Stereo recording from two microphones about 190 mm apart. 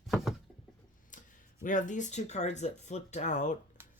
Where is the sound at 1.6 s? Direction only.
45° left (ahead or behind).